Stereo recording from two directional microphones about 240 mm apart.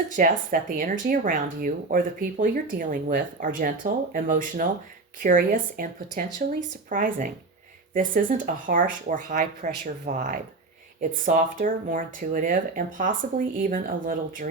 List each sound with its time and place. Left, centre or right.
0.2 s speech: right